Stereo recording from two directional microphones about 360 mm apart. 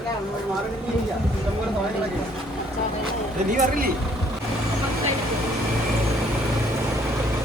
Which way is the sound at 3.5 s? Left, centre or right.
Right.